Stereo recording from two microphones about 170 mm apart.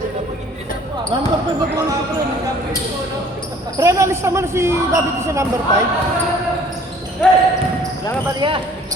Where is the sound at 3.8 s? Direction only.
15° right (ahead or behind).